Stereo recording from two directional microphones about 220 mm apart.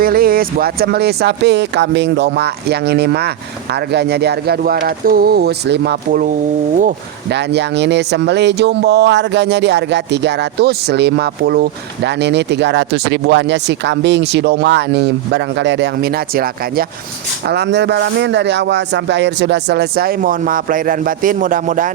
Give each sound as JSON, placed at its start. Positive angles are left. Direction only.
{"t": 0.0, "sound": "speech", "side_deg": -40}